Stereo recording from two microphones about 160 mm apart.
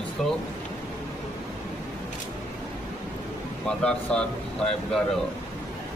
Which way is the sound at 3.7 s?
5° left (ahead or behind).